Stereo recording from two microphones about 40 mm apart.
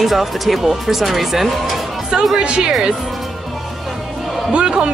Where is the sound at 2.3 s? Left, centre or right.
Right.